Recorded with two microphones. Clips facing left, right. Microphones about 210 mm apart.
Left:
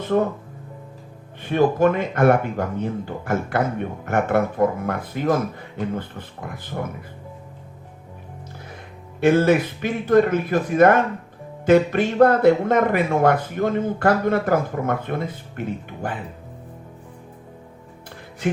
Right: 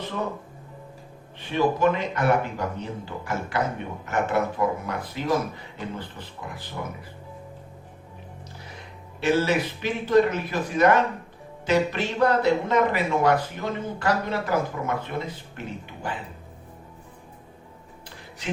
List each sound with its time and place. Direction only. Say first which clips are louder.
0.0 s speech: left 10 dB; 50° left (ahead or behind)
1.4 s speech: left 5 dB; 50° left (ahead or behind)
9.2 s speech: left 6 dB; 50° left (ahead or behind)